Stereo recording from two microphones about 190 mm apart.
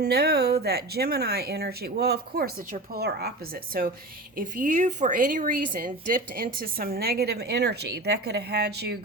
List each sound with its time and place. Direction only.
0.0 s a woman's voice: 55° right (ahead or behind)
4.4 s a woman's voice: 45° right (ahead or behind)